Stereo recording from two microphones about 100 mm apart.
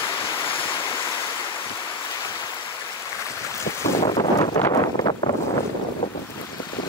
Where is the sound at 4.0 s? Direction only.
60° left (ahead or behind).